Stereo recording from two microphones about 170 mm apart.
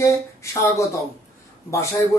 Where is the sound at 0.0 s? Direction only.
15° left (ahead or behind).